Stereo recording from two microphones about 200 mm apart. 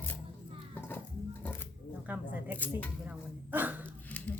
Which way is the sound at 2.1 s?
10° right (ahead or behind).